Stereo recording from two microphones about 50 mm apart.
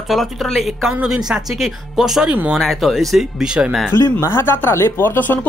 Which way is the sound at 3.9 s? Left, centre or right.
Left.